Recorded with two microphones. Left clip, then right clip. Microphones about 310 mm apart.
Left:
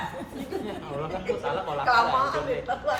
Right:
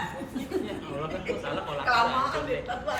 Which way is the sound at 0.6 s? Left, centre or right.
Left.